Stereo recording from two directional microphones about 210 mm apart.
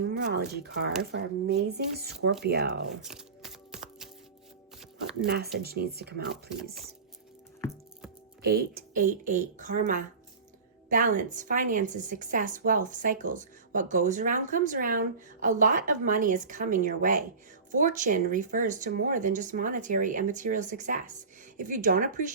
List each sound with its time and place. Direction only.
0.0 s speech: 50° right (ahead or behind)
3.0 s a sound: centre (ahead or behind)
5.2 s speech: 50° right (ahead or behind)
6.3 s speech: centre (ahead or behind)
8.4 s a woman's voice: 45° right (ahead or behind)